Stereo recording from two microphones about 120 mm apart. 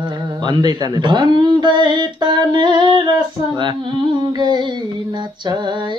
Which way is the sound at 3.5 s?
40° right (ahead or behind).